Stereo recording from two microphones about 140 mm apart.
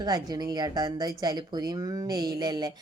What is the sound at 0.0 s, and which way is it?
A woman's voice, 30° right (ahead or behind).